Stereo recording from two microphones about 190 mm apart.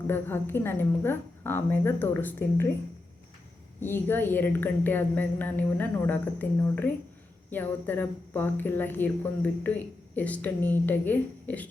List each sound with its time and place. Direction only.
0.1 s speech: 10° left (ahead or behind)
3.8 s speech: 10° left (ahead or behind)